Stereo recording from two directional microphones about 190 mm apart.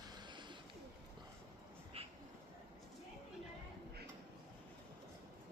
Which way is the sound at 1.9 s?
30° right (ahead or behind).